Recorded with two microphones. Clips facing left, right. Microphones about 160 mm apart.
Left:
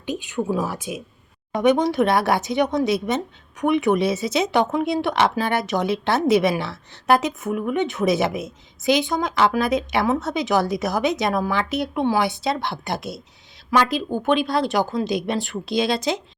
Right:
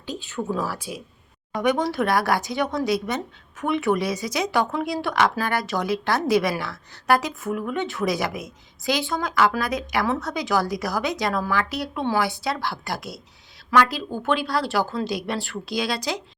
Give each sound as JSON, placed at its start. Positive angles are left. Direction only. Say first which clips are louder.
{"t": 0.0, "sound": "a woman's voice", "louder": "left 4 dB", "side_deg": 20}